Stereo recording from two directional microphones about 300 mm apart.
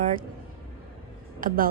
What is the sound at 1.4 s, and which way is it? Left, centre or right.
Speech, right.